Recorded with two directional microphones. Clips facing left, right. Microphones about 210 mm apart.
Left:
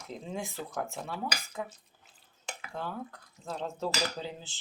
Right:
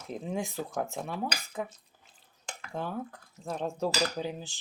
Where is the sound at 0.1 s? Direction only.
15° right (ahead or behind).